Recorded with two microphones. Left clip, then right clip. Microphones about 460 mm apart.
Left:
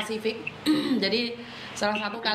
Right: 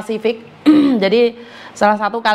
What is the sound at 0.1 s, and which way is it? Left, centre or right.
A woman's voice, right.